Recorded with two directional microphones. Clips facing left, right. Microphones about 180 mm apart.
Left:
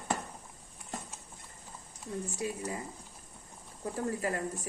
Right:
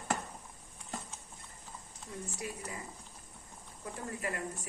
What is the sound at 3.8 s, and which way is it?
Speech, 35° left (ahead or behind).